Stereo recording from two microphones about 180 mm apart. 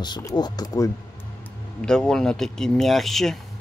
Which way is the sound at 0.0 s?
20° left (ahead or behind).